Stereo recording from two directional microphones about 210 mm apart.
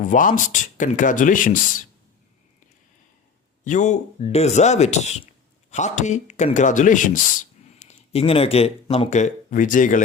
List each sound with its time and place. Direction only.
0.0 s speech: 40° left (ahead or behind)
3.6 s speech: 35° left (ahead or behind)